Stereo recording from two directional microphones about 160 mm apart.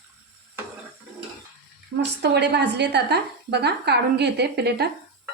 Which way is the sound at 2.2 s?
90° right.